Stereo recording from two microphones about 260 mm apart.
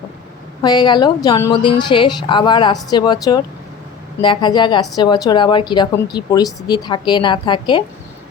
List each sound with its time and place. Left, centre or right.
0.6 s a woman's voice: centre